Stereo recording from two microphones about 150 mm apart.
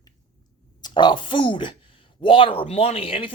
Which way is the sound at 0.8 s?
30° left (ahead or behind).